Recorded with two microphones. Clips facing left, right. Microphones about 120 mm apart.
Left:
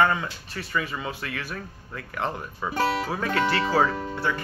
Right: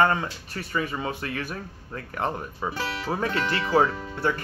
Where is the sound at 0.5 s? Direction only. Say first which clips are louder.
Right 1 dB; 45° right (ahead or behind).